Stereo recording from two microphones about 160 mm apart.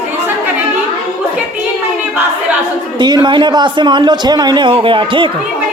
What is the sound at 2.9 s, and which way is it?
A man's voice, 25° right (ahead or behind).